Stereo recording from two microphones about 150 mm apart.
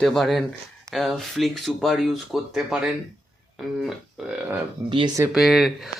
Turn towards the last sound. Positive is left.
turn(degrees=0)  # may be behind; listen again after turning